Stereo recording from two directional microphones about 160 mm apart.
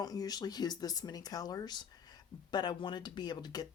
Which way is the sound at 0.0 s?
25° left (ahead or behind).